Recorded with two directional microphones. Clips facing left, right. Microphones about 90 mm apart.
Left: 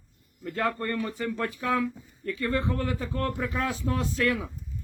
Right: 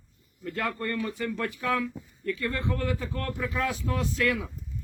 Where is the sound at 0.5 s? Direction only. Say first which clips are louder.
Left 2 dB; 30° left (ahead or behind).